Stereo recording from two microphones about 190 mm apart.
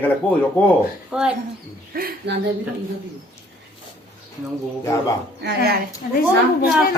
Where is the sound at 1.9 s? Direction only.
50° right (ahead or behind).